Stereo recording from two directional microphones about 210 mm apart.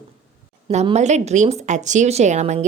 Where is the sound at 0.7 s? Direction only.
30° right (ahead or behind).